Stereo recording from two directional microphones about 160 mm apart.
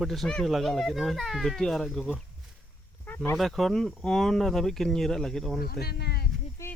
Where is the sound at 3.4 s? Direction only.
Centre (ahead or behind).